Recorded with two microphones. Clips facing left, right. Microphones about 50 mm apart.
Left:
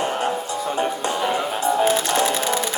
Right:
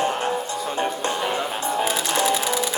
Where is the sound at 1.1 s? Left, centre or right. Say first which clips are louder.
Left 2 dB; centre.